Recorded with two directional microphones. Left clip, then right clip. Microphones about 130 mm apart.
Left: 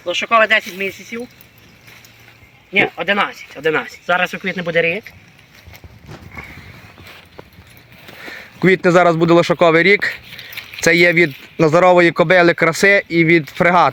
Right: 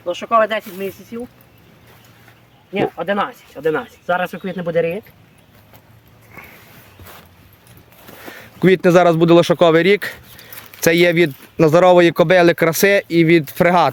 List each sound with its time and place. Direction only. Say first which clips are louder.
0.0 s speech: left 2 dB; 10° right (ahead or behind)
3.0 s speech: left 3 dB; centre (ahead or behind)
8.2 s speech: even; 15° right (ahead or behind)